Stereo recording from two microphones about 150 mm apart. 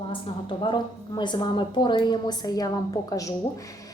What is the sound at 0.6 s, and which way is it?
A woman's voice, 30° left (ahead or behind).